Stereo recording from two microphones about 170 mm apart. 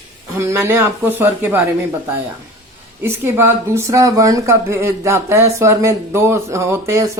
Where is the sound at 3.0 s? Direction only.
15° right (ahead or behind).